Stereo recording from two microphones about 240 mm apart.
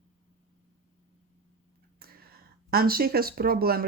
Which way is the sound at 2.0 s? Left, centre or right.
Right.